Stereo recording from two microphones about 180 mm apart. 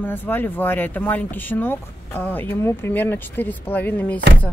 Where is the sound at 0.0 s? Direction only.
10° left (ahead or behind).